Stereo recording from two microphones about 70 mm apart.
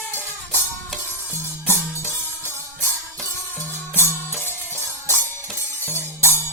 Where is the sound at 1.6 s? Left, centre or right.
Right.